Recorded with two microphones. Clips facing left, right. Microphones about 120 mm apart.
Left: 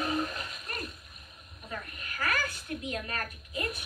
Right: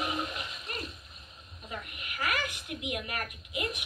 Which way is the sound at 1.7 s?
20° right (ahead or behind).